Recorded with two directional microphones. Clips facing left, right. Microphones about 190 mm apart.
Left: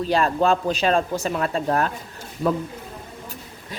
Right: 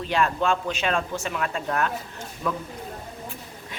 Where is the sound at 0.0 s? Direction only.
35° left (ahead or behind).